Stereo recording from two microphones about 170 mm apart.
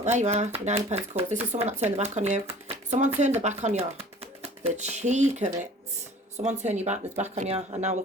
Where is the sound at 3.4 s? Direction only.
40° right (ahead or behind).